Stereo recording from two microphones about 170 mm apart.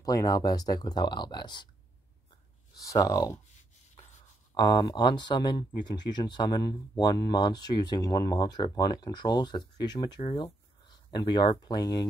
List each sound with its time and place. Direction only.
0.0 s speech: 20° left (ahead or behind)
2.7 s speech: 20° left (ahead or behind)
4.6 s speech: 25° left (ahead or behind)